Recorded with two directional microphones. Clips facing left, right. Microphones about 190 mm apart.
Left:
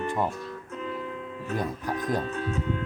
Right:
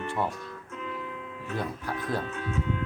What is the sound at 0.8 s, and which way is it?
Music, 35° left (ahead or behind).